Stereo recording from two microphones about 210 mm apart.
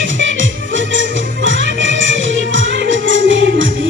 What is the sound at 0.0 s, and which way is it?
Music, 60° right (ahead or behind).